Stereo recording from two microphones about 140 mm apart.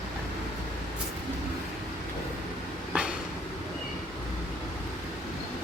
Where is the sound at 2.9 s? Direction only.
10° right (ahead or behind).